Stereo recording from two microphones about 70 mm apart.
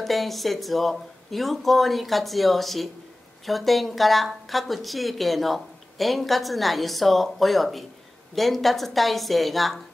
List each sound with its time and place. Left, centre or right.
0.0 s speech: centre